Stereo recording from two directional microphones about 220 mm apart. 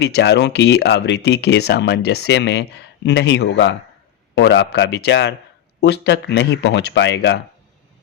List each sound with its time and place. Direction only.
0.0 s speech: 50° left (ahead or behind)